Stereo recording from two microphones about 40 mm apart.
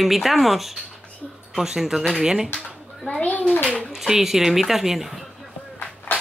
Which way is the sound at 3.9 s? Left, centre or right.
Centre.